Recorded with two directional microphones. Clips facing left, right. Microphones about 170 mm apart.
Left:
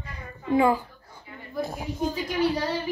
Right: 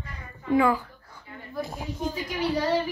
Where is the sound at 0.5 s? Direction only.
25° left (ahead or behind).